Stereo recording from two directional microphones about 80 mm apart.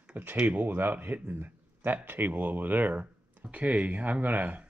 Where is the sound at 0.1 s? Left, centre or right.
Right.